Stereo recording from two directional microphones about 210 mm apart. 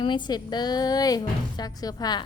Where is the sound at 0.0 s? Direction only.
20° left (ahead or behind).